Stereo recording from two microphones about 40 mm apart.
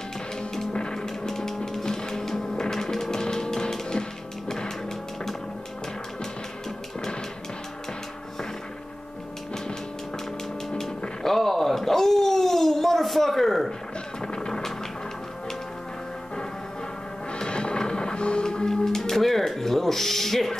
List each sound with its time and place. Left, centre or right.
0.7 s music: left
1.0 s music: centre
11.2 s a sound: centre
14.2 s music: centre
17.3 s music: left; by 20.5 s centre